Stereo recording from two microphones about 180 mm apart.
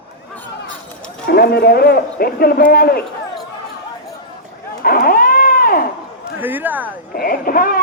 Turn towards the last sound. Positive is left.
turn(degrees=55)  # may be behind; listen again after turning